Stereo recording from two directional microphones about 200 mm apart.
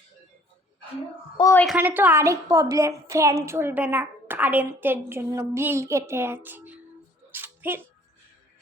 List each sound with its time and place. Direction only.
1.4 s a woman's voice: 15° left (ahead or behind)
1.6 s a woman's voice: 5° right (ahead or behind)
7.3 s a sound: 10° right (ahead or behind)